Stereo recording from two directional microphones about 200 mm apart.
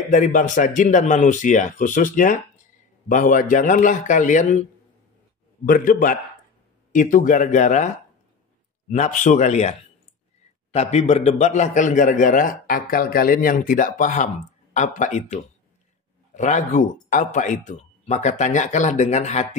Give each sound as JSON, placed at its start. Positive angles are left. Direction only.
{"t": 0.1, "sound": "a man's voice", "side_deg": 40}
{"t": 5.7, "sound": "a man's voice", "side_deg": 45}